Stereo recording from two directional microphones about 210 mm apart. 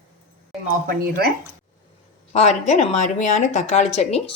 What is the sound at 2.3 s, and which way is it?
Speech, 30° left (ahead or behind).